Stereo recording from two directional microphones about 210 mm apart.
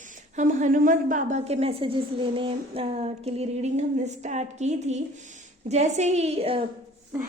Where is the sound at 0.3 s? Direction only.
40° right (ahead or behind).